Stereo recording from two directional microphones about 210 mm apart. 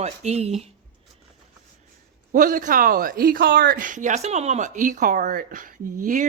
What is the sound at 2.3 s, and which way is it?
A woman's voice, 40° right (ahead or behind).